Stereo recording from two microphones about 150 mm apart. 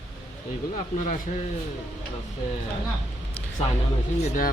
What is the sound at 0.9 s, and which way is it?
Speech, 60° left (ahead or behind).